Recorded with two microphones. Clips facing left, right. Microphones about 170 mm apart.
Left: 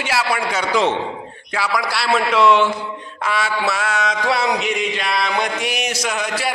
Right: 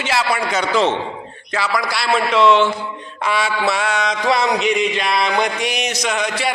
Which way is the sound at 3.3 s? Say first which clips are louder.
Right 2 dB; centre (ahead or behind).